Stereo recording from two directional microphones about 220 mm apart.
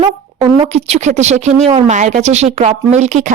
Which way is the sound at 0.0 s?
25° right (ahead or behind).